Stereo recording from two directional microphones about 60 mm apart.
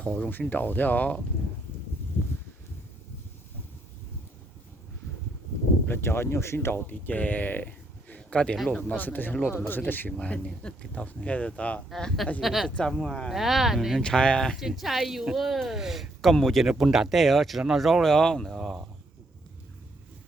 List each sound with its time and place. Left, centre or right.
0.3 s speech: left
5.9 s speech: left
6.8 s speech: left
8.5 s speech: centre
9.0 s speech: left
10.1 s speech: left
11.9 s speech: centre
12.4 s speech: centre
13.0 s speech: centre
13.3 s speech: centre
14.0 s speech: centre
14.5 s speech: centre